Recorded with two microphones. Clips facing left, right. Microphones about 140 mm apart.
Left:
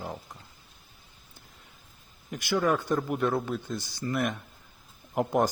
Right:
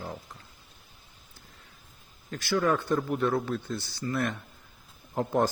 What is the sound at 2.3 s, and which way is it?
A man's voice, 15° left (ahead or behind).